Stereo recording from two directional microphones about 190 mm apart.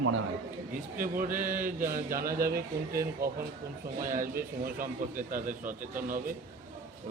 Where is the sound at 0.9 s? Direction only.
45° right (ahead or behind).